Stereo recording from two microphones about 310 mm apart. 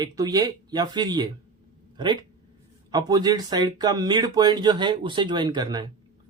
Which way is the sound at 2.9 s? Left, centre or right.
Centre.